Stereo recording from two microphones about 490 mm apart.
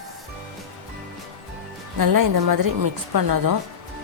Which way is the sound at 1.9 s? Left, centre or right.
Right.